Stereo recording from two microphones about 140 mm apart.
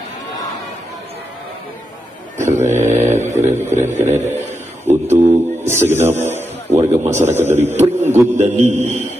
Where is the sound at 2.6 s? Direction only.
60° right (ahead or behind).